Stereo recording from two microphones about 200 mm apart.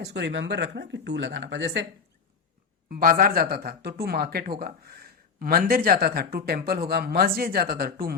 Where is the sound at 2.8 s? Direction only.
45° right (ahead or behind).